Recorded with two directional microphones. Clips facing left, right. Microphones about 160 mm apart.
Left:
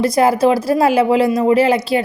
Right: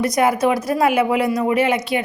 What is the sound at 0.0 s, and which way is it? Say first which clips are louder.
A woman's voice: left 4 dB; 30° left (ahead or behind).